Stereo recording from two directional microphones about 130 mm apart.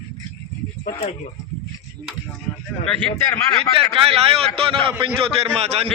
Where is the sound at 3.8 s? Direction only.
45° right (ahead or behind).